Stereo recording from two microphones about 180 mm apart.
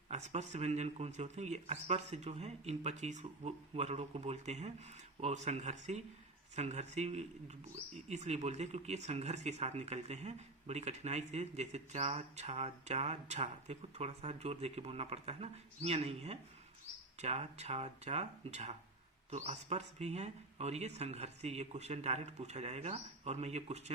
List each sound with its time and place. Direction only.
0.1 s speech: 40° right (ahead or behind)